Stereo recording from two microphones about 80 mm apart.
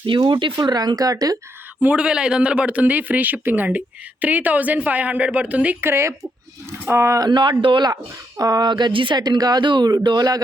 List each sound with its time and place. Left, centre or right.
0.1 s speech: right
0.5 s speech: right
1.8 s a man's voice: centre
5.8 s speech: right
7.2 s speech: right
8.4 s speech: right
8.7 s speech: right
10.0 s speech: right